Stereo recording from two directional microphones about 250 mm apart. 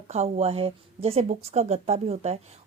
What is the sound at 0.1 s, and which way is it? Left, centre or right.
Speech, right.